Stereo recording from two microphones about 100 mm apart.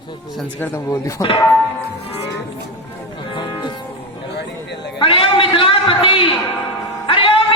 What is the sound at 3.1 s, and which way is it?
Music, 55° left (ahead or behind).